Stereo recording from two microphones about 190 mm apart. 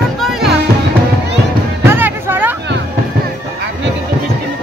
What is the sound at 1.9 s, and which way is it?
Music, 10° right (ahead or behind).